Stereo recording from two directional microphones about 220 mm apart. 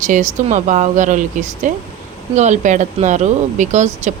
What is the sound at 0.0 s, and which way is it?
Speech, 35° right (ahead or behind).